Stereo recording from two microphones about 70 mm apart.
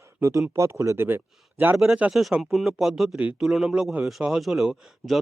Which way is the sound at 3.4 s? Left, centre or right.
Centre.